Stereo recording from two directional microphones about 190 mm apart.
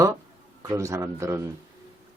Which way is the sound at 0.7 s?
15° right (ahead or behind).